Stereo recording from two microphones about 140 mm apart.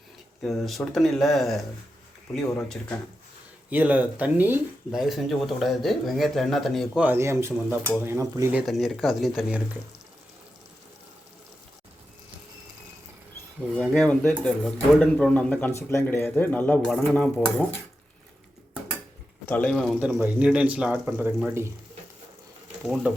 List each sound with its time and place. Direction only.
0.4 s a man's voice: centre (ahead or behind)
3.7 s speech: 10° right (ahead or behind)
4.9 s a man's voice: centre (ahead or behind)
7.0 s speech: 15° right (ahead or behind)
8.6 s a man's voice: centre (ahead or behind)
13.7 s speech: 5° left (ahead or behind)
15.7 s speech: 20° left (ahead or behind)
19.5 s speech: 10° left (ahead or behind)
20.0 s speech: 10° right (ahead or behind)
22.8 s a man's voice: 5° right (ahead or behind)